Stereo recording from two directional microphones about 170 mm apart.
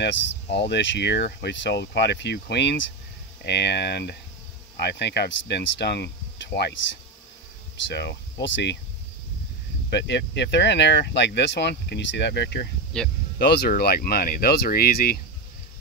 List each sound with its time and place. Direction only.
0.0 s speech: 90° left
7.9 s speech: 85° left
9.8 s speech: 90° left
12.9 s speech: 5° left (ahead or behind)
13.4 s speech: 70° left (ahead or behind)